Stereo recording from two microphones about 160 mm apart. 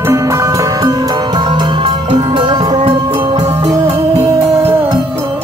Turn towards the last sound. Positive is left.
turn(degrees=-20)  # may be behind; listen again after turning